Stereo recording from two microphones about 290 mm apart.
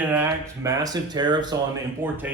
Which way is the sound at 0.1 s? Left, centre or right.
Centre.